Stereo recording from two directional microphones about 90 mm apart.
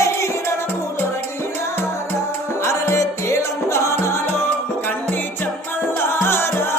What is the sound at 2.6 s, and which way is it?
Music, 30° left (ahead or behind).